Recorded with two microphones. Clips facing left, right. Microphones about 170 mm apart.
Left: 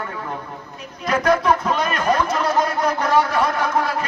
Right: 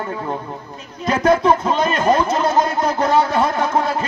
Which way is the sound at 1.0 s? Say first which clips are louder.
Right 3 dB; 25° right (ahead or behind).